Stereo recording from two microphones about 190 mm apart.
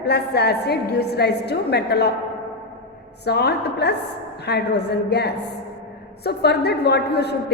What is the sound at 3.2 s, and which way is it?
A woman's voice, 60° left (ahead or behind).